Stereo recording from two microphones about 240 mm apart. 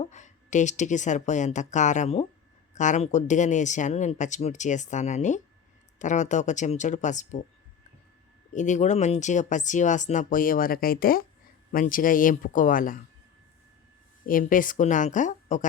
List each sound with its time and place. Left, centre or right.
0.0 s speech: left
8.5 s speech: left
14.3 s speech: left